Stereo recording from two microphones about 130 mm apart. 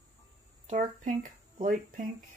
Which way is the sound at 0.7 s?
80° right.